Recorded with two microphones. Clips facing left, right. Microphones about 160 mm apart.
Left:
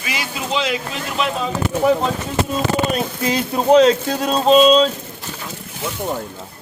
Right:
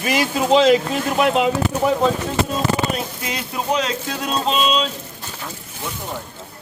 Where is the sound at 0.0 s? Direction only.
45° right (ahead or behind).